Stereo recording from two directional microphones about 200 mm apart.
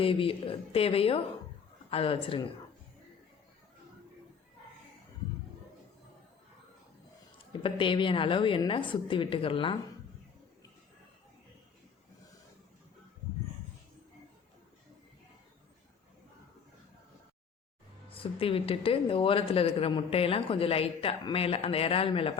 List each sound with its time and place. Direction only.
0.0 s speech: 25° left (ahead or behind)
7.5 s speech: 25° left (ahead or behind)
18.1 s speech: 25° left (ahead or behind)